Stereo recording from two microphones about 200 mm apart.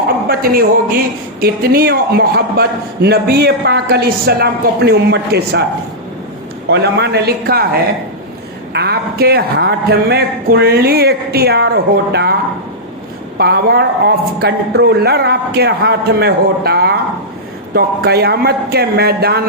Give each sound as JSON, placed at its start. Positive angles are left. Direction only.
{"t": 0.3, "sound": "a man's voice", "side_deg": -45}
{"t": 6.7, "sound": "a man's voice", "side_deg": -55}
{"t": 13.4, "sound": "a man's voice", "side_deg": -55}